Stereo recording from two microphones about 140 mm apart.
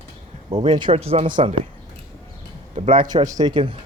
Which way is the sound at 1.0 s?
45° right (ahead or behind).